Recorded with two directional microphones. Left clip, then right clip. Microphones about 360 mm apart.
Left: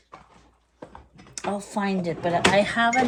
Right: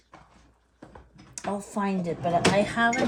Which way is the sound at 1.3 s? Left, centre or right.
Centre.